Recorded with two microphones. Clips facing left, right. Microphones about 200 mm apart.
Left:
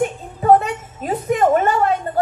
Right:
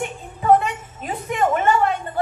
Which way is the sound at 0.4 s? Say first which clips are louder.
Left 3 dB; 40° left (ahead or behind).